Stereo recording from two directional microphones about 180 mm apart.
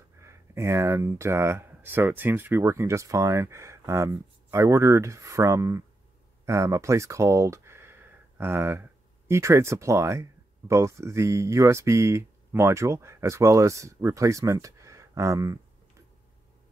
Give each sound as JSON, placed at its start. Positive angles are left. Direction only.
{"t": 0.2, "sound": "speech", "side_deg": -15}